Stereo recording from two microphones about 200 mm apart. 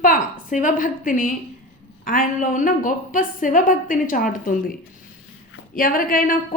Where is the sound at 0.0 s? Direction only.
40° left (ahead or behind).